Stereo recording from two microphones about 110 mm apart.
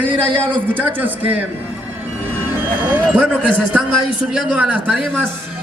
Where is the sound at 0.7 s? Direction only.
15° right (ahead or behind).